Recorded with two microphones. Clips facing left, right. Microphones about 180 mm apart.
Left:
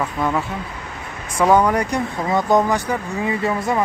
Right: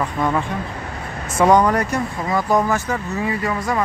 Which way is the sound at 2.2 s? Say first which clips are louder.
Left 2 dB; 25° left (ahead or behind).